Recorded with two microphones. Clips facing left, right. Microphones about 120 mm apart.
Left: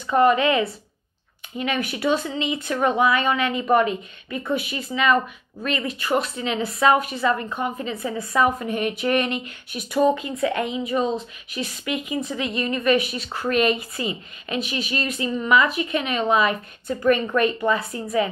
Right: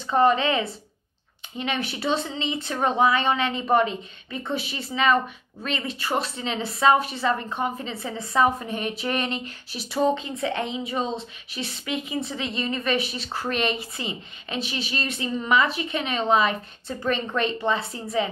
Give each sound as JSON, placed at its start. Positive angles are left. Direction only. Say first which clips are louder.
{"t": 0.0, "sound": "speech", "louder": "left 2 dB", "side_deg": -25}